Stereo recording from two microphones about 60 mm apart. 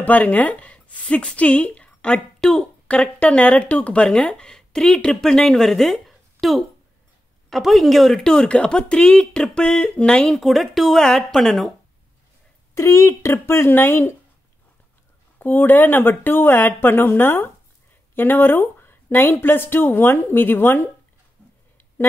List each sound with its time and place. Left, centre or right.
0.0 s a woman's voice: left
10.3 s speech: centre
12.7 s speech: left
15.3 s speech: left